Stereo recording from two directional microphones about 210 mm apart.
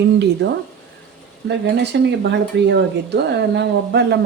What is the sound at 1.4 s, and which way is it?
Speech, 55° right (ahead or behind).